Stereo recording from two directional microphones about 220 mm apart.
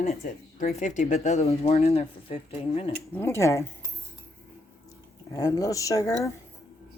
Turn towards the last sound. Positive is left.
turn(degrees=15)  # may be behind; listen again after turning